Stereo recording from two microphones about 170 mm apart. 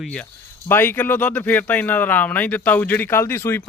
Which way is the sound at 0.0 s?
5° left (ahead or behind).